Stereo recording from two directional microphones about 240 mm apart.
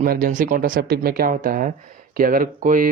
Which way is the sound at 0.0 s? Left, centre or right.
Right.